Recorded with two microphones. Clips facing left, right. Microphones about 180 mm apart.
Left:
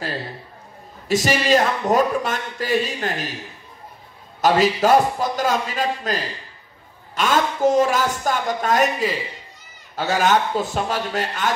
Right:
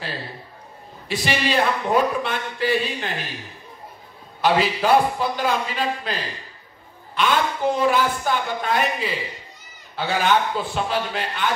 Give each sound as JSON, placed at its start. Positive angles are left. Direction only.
{"t": 1.0, "sound": "speech", "side_deg": 45}
{"t": 4.4, "sound": "speech", "side_deg": 45}
{"t": 7.2, "sound": "speech", "side_deg": 45}